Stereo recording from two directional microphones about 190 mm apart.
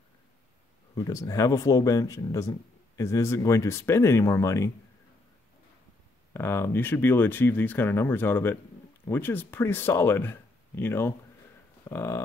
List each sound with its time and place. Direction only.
0.9 s speech: 20° left (ahead or behind)
6.3 s speech: 10° left (ahead or behind)